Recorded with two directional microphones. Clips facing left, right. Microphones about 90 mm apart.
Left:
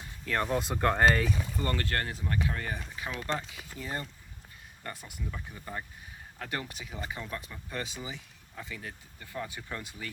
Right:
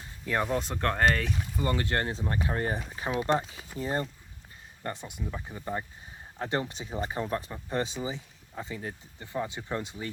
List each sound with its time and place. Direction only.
0.4 s speech: centre (ahead or behind)
1.5 s speech: 15° right (ahead or behind); by 2.8 s 35° right (ahead or behind)
3.1 s speech: 20° right (ahead or behind)
3.3 s speech: 30° right (ahead or behind)